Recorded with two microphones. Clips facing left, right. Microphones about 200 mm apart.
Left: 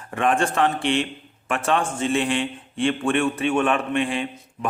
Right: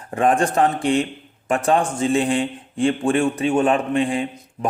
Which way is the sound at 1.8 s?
15° right (ahead or behind).